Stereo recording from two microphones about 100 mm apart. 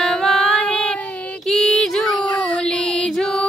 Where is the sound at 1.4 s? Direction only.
5° left (ahead or behind).